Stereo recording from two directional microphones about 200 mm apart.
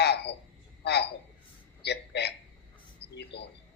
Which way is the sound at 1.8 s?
55° left (ahead or behind).